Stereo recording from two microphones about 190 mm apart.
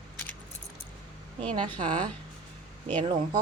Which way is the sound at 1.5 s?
25° right (ahead or behind).